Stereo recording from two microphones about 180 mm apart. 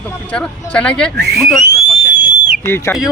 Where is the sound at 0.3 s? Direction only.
5° left (ahead or behind).